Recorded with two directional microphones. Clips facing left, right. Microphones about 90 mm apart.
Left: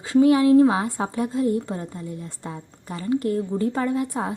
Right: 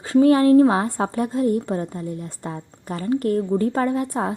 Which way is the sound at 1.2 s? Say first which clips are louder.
Right 1 dB; 25° right (ahead or behind).